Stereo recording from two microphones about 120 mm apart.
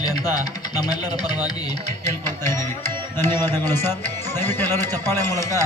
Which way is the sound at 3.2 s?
20° left (ahead or behind).